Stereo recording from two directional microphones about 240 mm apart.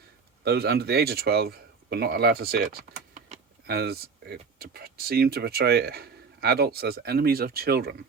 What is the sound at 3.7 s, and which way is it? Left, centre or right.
Speech, right.